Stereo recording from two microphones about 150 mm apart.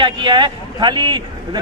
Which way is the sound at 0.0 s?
30° right (ahead or behind).